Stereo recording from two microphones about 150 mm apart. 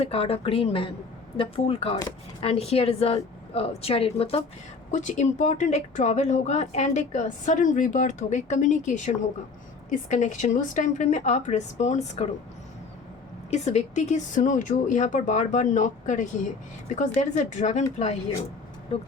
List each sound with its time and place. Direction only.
0.0 s a woman's voice: 40° left (ahead or behind)
4.9 s speech: 55° left (ahead or behind)
13.5 s speech: 50° left (ahead or behind)